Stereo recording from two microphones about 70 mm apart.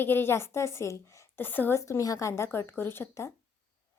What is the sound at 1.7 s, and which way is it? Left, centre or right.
A woman's voice, left.